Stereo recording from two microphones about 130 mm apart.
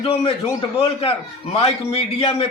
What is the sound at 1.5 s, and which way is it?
Speech, 50° left (ahead or behind).